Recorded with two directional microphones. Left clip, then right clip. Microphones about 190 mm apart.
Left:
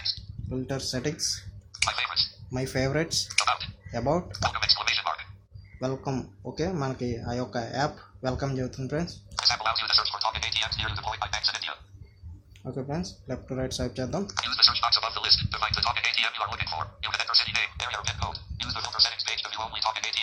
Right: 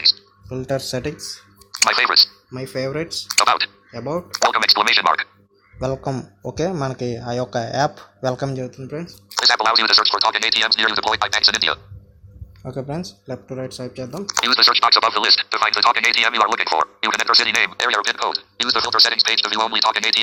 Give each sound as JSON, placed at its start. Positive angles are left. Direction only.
{"t": 0.7, "sound": "speech", "side_deg": -40}
{"t": 2.5, "sound": "speech", "side_deg": 0}
{"t": 3.3, "sound": "speech", "side_deg": -45}
{"t": 3.9, "sound": "speech", "side_deg": 5}
{"t": 4.4, "sound": "speech", "side_deg": -55}
{"t": 8.7, "sound": "speech", "side_deg": 5}
{"t": 9.3, "sound": "speech", "side_deg": -45}
{"t": 13.5, "sound": "speech", "side_deg": -5}
{"t": 14.3, "sound": "speech", "side_deg": -45}